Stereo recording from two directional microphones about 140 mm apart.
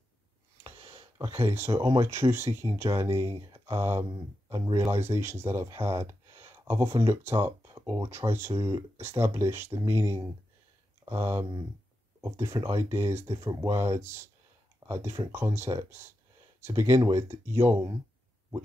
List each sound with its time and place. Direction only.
1.1 s a sound: 20° right (ahead or behind)
1.6 s speech: 25° right (ahead or behind)
4.5 s speech: 35° right (ahead or behind)
4.7 s speech: 20° right (ahead or behind)